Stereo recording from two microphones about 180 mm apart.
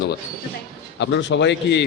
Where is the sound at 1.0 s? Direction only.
90° left.